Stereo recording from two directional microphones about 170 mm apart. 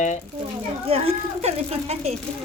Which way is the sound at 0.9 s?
35° right (ahead or behind).